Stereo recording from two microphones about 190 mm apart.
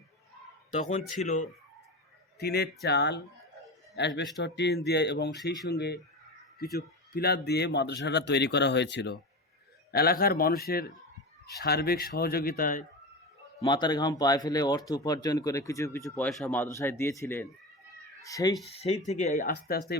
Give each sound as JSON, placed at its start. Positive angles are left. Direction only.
{"t": 0.7, "sound": "speech", "side_deg": 40}
{"t": 2.4, "sound": "a man's voice", "side_deg": 60}
{"t": 13.6, "sound": "speech", "side_deg": 25}
{"t": 18.8, "sound": "speech", "side_deg": 35}